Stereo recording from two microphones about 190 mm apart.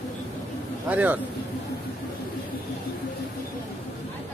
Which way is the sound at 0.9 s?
10° right (ahead or behind).